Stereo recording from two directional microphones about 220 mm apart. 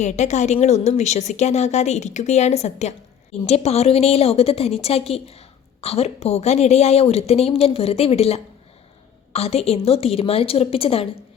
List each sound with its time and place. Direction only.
0.0 s a woman's voice: 30° left (ahead or behind)